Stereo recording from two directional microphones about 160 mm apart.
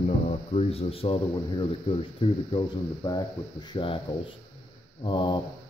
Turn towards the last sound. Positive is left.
turn(degrees=30)  # may be behind; listen again after turning